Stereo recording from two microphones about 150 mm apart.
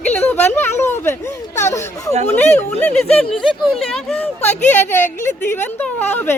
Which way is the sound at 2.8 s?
10° left (ahead or behind).